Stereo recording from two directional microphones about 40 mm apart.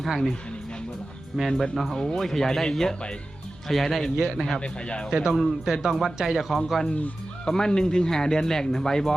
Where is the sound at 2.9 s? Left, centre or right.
Left.